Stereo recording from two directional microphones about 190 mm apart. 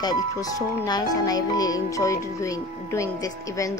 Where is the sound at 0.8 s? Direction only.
20° left (ahead or behind).